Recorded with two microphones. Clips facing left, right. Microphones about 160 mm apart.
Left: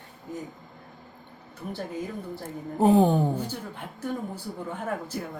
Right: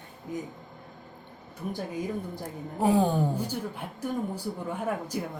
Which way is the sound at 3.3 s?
10° right (ahead or behind).